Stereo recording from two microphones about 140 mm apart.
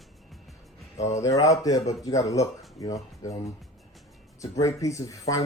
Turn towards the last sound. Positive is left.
turn(degrees=25)  # may be behind; listen again after turning